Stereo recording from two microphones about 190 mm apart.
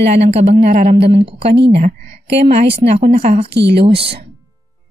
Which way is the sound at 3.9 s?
30° right (ahead or behind).